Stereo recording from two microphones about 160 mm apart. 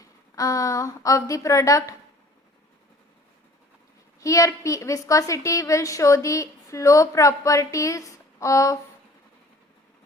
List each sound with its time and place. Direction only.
0.0 s a woman's voice: 20° left (ahead or behind)
4.2 s a woman's voice: 20° left (ahead or behind)